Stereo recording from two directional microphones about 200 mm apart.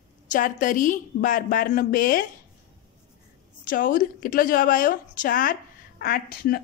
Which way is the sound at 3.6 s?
45° left (ahead or behind).